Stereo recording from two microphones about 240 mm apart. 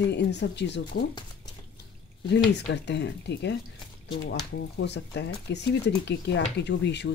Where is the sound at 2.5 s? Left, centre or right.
Left.